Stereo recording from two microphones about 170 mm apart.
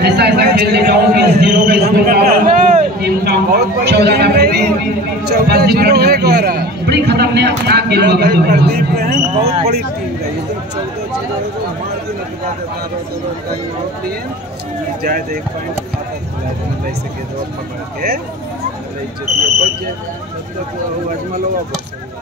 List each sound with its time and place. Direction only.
0.0 s a man's voice: 75° right (ahead or behind)
1.4 s a sound: 75° right (ahead or behind)
5.2 s a man's voice: 70° right (ahead or behind)
9.3 s speech: 40° right (ahead or behind)
15.0 s speech: 60° right (ahead or behind)